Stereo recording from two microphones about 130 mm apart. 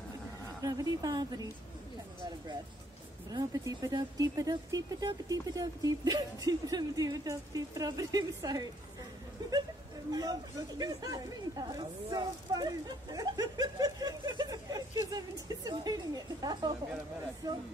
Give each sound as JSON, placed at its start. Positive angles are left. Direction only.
{"t": 0.6, "sound": "speech", "side_deg": -30}
{"t": 3.3, "sound": "speech", "side_deg": -30}